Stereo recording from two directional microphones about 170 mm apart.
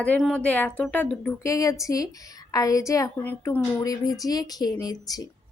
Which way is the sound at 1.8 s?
20° left (ahead or behind).